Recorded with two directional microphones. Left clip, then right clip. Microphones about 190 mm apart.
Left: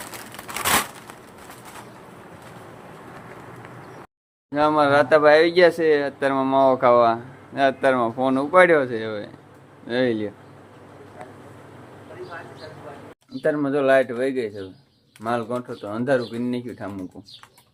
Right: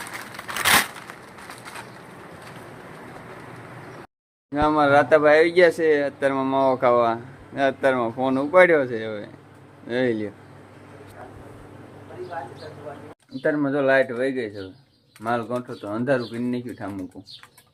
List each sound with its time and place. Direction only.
0.6 s crushing: 5° left (ahead or behind)
4.5 s speech: 10° left (ahead or behind)
13.4 s speech: 10° left (ahead or behind)